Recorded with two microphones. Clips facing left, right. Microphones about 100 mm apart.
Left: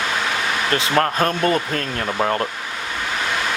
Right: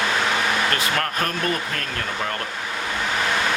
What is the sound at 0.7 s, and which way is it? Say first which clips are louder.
Speech: left 5 dB; 30° left (ahead or behind).